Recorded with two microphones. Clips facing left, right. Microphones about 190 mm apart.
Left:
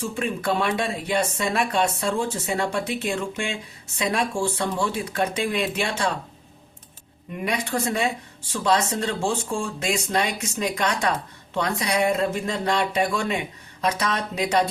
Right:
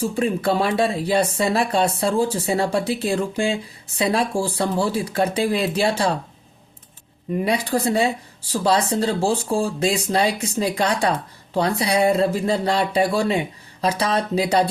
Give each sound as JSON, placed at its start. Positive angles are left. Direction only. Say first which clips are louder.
{"t": 0.0, "sound": "speech", "louder": "right 5 dB", "side_deg": -35}
{"t": 7.3, "sound": "speech", "louder": "right 6 dB", "side_deg": -35}